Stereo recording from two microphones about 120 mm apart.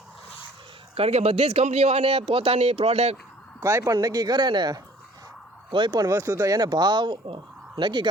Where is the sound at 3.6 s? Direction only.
25° right (ahead or behind).